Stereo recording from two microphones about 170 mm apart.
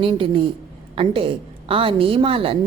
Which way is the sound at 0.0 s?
30° right (ahead or behind).